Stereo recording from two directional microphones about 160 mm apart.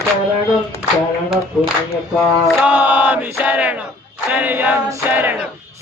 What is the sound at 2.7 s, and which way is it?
Choir, 10° right (ahead or behind).